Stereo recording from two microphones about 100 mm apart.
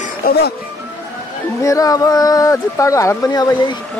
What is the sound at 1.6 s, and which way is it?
Speech, 35° left (ahead or behind).